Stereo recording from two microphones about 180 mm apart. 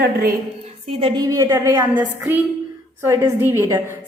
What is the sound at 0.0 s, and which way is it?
Speech, 55° right (ahead or behind).